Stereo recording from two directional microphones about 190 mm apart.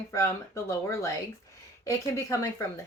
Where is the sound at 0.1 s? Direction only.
15° left (ahead or behind).